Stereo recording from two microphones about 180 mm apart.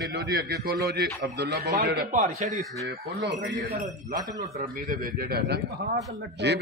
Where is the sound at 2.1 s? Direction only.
45° right (ahead or behind).